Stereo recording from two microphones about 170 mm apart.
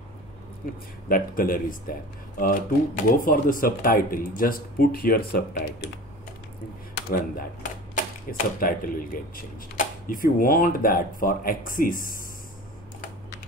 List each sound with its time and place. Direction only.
0.6 s speech: 50° left (ahead or behind)
7.1 s speech: 55° left (ahead or behind)